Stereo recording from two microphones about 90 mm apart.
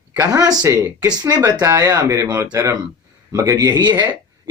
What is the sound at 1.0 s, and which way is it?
Speech, 45° right (ahead or behind).